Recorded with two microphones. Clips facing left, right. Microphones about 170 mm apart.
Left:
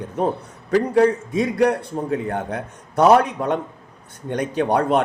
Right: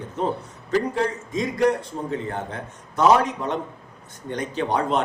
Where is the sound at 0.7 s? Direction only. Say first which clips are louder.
Left 7 dB; 65° left (ahead or behind).